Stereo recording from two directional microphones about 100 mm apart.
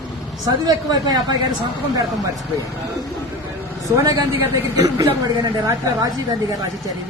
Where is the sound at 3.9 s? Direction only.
35° right (ahead or behind).